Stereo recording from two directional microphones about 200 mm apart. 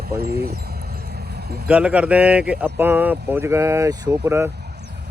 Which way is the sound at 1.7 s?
5° right (ahead or behind).